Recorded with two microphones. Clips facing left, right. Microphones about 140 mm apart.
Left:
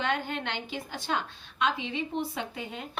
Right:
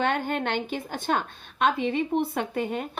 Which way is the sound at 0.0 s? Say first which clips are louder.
Right 5 dB; 50° right (ahead or behind).